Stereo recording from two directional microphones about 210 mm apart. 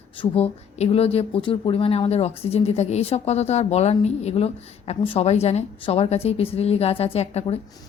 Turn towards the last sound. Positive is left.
turn(degrees=30)  # may be behind; listen again after turning